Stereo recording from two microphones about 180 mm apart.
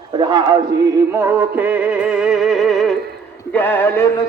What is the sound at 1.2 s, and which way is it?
Music, 10° right (ahead or behind).